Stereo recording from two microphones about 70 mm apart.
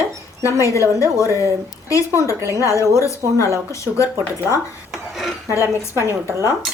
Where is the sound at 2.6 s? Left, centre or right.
Left.